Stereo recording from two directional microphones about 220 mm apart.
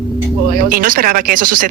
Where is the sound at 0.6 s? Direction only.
40° right (ahead or behind).